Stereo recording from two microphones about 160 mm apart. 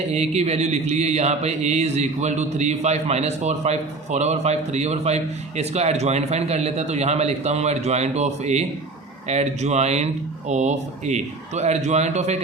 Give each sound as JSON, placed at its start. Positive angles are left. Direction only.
{"t": 0.1, "sound": "speech", "side_deg": -45}